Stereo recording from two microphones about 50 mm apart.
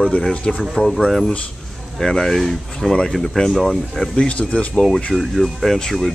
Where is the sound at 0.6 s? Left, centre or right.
Centre.